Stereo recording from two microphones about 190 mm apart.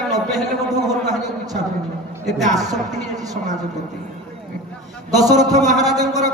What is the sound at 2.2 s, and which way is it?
Speech, centre (ahead or behind).